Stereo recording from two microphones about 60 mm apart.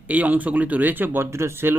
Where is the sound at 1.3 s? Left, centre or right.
Right.